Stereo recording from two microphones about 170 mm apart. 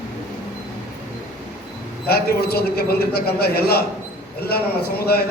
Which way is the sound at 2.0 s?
65° left (ahead or behind).